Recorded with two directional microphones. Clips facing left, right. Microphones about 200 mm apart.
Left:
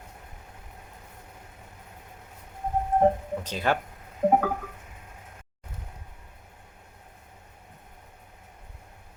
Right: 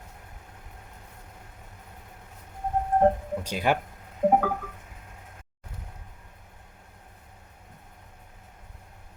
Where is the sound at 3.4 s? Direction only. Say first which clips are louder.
Right 1 dB; 10° right (ahead or behind).